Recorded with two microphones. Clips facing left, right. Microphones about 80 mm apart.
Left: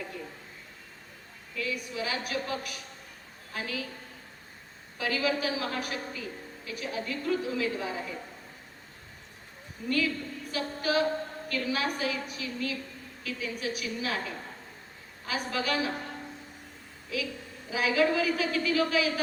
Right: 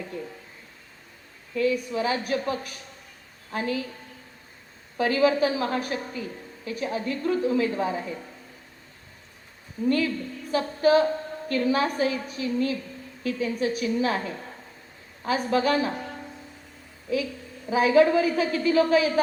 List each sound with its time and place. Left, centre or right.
1.5 s a woman's voice: right
4.9 s a woman's voice: right
9.8 s a woman's voice: right
10.5 s a sound: right
11.4 s a woman's voice: right
17.1 s a woman's voice: right